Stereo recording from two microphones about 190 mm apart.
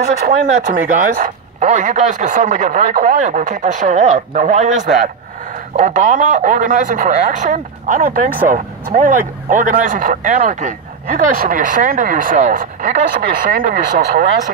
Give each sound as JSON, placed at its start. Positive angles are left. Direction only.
{"t": 0.3, "sound": "speech", "side_deg": -40}
{"t": 5.8, "sound": "speech", "side_deg": -40}